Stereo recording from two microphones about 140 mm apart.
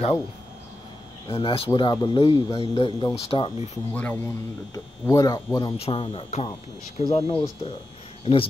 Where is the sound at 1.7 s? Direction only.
30° left (ahead or behind).